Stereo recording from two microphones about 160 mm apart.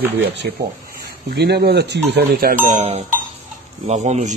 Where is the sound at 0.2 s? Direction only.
90° right.